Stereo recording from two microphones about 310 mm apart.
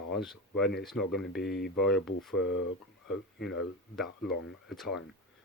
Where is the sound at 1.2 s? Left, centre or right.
Left.